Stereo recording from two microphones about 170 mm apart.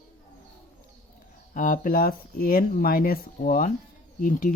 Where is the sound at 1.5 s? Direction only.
50° left (ahead or behind).